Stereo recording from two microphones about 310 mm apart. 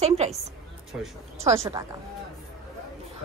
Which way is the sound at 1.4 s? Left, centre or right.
Centre.